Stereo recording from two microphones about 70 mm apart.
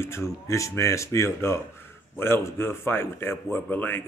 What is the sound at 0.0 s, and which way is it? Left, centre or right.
Speech, left.